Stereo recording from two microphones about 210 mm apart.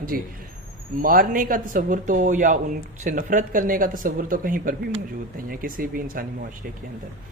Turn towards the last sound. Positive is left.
turn(degrees=-40)  # may be behind; listen again after turning